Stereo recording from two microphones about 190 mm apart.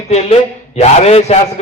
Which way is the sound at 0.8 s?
35° left (ahead or behind).